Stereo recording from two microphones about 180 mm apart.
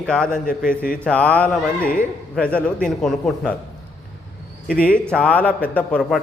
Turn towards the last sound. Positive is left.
turn(degrees=5)  # may be behind; listen again after turning